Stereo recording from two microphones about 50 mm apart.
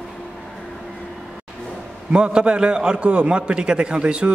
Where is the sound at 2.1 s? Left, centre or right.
Centre.